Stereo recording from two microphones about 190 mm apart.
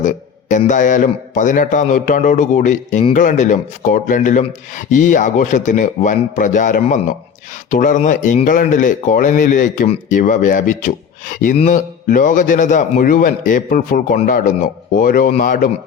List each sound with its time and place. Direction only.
0.0 s a man's voice: 40° left (ahead or behind)